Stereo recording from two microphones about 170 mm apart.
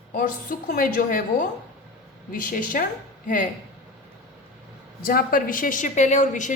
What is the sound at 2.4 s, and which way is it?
Speech, 55° left (ahead or behind).